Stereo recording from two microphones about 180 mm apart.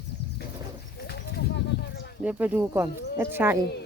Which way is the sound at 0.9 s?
65° left (ahead or behind).